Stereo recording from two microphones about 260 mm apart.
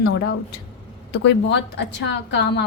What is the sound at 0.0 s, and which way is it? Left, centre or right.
Speech, left.